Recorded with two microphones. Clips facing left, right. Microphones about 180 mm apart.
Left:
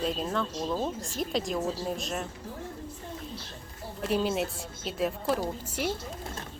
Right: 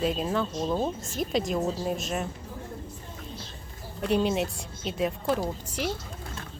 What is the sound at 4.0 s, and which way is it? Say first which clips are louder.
Speech: right 3 dB; centre (ahead or behind).